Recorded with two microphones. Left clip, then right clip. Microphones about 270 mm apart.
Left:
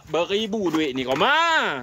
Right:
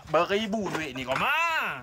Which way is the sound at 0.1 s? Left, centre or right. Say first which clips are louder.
Left 2 dB; centre.